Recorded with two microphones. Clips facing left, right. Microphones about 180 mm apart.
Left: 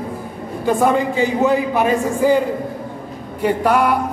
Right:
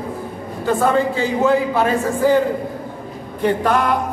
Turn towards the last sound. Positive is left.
turn(degrees=10)  # may be behind; listen again after turning